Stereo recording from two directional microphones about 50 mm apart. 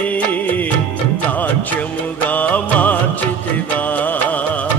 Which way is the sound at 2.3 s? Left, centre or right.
Left.